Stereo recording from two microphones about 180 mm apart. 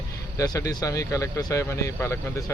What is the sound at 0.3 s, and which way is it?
Speech, 20° left (ahead or behind).